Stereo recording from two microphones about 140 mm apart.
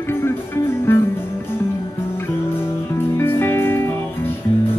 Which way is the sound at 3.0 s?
15° left (ahead or behind).